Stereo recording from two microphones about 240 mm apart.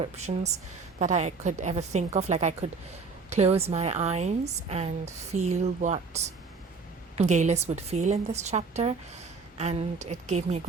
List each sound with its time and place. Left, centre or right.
0.0 s a woman's voice: right